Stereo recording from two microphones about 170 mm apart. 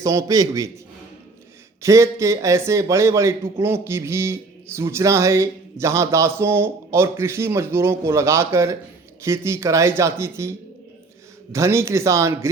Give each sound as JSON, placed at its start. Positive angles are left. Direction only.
{"t": 0.0, "sound": "a man's voice", "side_deg": -20}
{"t": 1.8, "sound": "a man's voice", "side_deg": -15}
{"t": 11.5, "sound": "a man's voice", "side_deg": -15}